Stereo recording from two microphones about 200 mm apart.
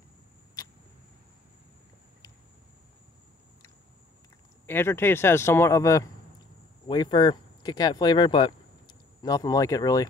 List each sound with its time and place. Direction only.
4.6 s speech: 10° left (ahead or behind)